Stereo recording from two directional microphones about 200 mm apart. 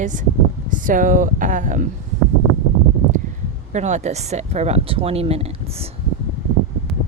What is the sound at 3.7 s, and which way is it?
Speech, 35° right (ahead or behind).